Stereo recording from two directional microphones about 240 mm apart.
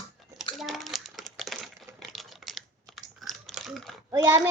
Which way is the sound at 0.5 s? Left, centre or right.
Centre.